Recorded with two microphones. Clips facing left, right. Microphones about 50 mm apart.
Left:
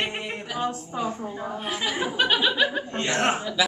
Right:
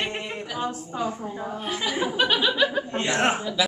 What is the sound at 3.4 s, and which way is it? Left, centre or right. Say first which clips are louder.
Speech: even; centre.